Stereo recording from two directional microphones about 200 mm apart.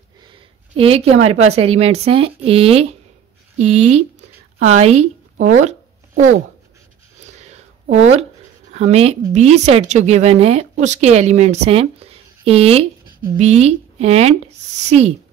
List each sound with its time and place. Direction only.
0.7 s speech: 30° right (ahead or behind)
7.4 s a sound: 35° right (ahead or behind)
8.7 s speech: 30° right (ahead or behind)